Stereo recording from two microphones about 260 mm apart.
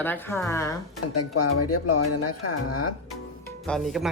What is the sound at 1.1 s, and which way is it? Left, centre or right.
Speech, left.